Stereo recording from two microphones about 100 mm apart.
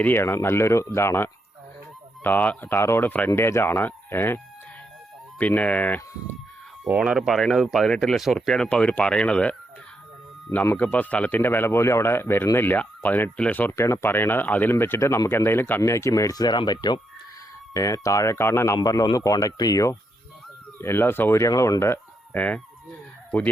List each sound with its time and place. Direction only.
0.0 s speech: 20° left (ahead or behind)
5.4 s speech: 15° left (ahead or behind)
6.8 s speech: 10° right (ahead or behind); by 17.0 s 45° left (ahead or behind)
17.7 s speech: 30° left (ahead or behind)
18.8 s speech: 40° left (ahead or behind)
20.8 s speech: 25° left (ahead or behind)